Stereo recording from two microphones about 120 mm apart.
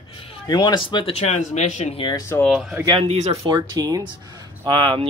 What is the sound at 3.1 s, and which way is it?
Speech, 65° right (ahead or behind).